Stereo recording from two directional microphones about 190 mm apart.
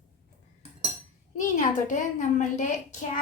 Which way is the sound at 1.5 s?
45° left (ahead or behind).